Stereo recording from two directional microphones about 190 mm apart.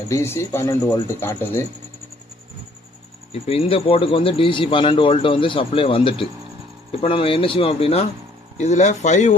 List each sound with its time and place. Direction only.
0.1 s speech: 15° left (ahead or behind)
3.4 s speech: 30° left (ahead or behind)